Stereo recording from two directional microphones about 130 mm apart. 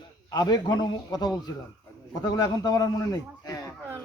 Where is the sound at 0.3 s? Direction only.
30° left (ahead or behind).